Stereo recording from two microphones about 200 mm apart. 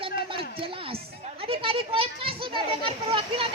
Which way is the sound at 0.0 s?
25° right (ahead or behind).